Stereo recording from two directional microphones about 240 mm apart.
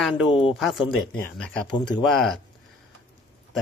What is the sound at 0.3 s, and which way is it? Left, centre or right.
Speech, left.